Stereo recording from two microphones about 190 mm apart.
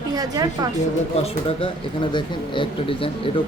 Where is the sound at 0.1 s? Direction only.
20° right (ahead or behind).